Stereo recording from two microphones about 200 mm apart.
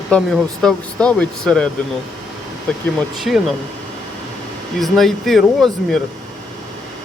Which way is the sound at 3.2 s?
Centre (ahead or behind).